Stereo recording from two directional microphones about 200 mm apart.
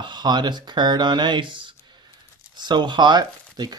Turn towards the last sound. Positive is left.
turn(degrees=-20)  # may be behind; listen again after turning